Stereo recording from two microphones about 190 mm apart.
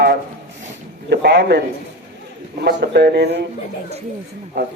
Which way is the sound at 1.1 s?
60° right (ahead or behind).